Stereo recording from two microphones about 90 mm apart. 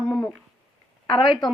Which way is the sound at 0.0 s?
15° left (ahead or behind).